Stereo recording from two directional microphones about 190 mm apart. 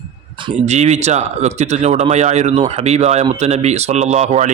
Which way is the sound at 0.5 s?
35° right (ahead or behind).